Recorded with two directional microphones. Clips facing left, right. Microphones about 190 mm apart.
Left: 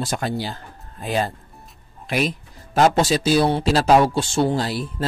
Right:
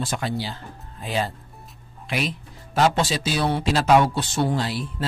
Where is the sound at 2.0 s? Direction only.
45° left (ahead or behind).